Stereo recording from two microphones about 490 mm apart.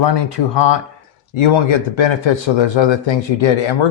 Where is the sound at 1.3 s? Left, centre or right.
Left.